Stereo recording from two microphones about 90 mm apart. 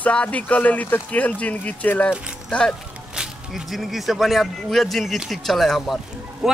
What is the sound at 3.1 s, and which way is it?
Speech, 5° right (ahead or behind).